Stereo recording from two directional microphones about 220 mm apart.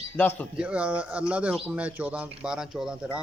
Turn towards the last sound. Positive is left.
turn(degrees=-5)  # may be behind; listen again after turning